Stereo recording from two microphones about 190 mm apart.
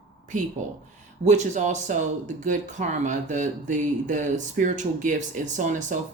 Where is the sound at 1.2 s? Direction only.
40° right (ahead or behind).